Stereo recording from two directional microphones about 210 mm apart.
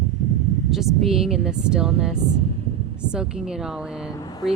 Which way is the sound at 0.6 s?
Centre (ahead or behind).